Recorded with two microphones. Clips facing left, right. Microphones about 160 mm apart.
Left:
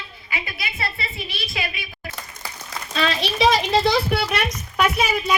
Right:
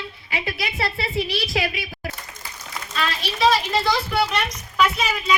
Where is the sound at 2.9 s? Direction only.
80° left; by 4.9 s 60° left (ahead or behind).